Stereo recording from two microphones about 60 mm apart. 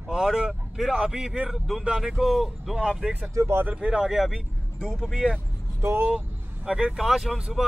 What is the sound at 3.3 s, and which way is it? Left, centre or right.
Speech, right.